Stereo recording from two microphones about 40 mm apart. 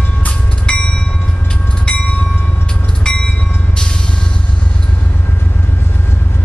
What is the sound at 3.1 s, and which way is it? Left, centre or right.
Train, centre.